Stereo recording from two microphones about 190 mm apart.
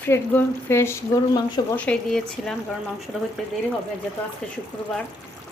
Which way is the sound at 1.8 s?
5° left (ahead or behind).